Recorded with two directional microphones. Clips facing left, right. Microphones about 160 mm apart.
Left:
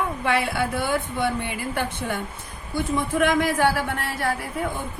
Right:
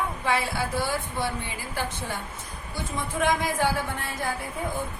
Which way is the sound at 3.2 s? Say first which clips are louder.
Left 3 dB; 65° left (ahead or behind).